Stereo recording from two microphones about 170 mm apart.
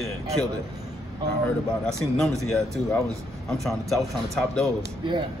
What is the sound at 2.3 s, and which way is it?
Speech, 20° right (ahead or behind).